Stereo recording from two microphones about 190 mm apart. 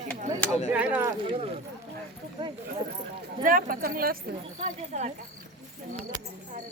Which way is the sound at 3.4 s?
50° right (ahead or behind).